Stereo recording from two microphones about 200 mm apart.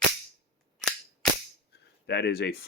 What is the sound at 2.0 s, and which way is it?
Speech, 55° left (ahead or behind).